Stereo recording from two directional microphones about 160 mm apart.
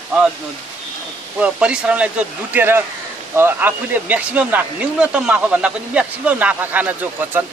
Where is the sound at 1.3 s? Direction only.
5° right (ahead or behind).